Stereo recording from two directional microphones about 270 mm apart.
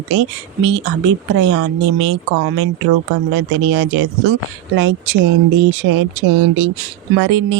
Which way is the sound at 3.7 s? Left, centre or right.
Right.